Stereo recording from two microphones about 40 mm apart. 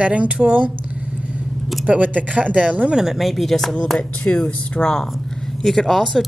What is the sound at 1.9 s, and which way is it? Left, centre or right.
Speech, right.